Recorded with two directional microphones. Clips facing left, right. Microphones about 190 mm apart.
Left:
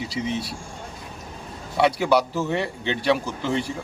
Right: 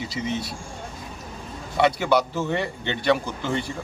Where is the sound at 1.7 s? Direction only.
5° left (ahead or behind).